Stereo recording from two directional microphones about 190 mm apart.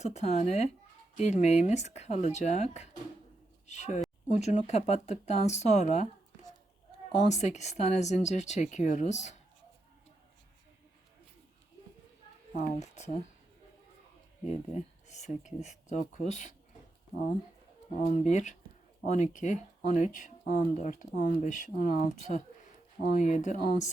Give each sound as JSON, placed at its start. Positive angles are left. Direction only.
{"t": 0.0, "sound": "speech", "side_deg": 35}
{"t": 7.3, "sound": "speech", "side_deg": 35}
{"t": 12.5, "sound": "speech", "side_deg": 35}
{"t": 14.4, "sound": "speech", "side_deg": 35}
{"t": 18.3, "sound": "speech", "side_deg": 40}